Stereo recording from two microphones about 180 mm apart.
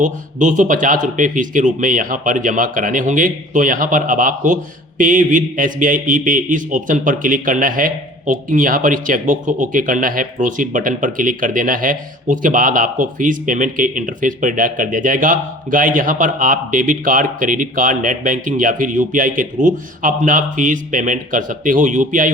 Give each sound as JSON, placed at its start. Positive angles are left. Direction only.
{"t": 0.0, "sound": "speech", "side_deg": -45}